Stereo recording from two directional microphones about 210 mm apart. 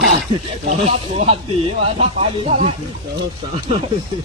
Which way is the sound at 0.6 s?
30° right (ahead or behind).